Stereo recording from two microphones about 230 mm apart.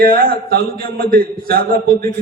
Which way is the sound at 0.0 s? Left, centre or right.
Right.